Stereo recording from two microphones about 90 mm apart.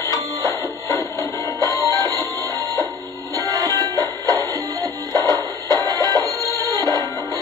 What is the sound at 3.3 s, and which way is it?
Music, 35° left (ahead or behind).